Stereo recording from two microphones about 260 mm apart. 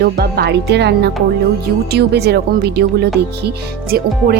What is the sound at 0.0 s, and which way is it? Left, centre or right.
Speech, right.